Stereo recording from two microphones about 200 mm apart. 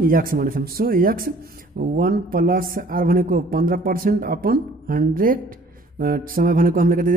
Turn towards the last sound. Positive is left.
turn(degrees=-45)  # may be behind; listen again after turning